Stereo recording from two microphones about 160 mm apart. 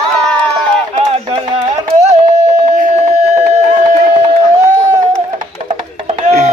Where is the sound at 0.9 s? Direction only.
35° right (ahead or behind).